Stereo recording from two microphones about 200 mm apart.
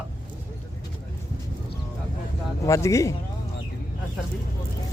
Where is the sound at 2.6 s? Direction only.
15° left (ahead or behind).